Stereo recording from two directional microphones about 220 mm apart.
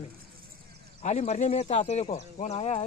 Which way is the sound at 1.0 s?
30° left (ahead or behind).